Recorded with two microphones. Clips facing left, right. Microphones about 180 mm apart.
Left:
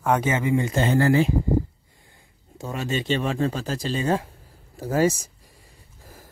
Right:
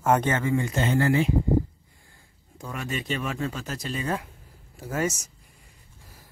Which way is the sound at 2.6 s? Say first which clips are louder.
Left 5 dB; 25° left (ahead or behind).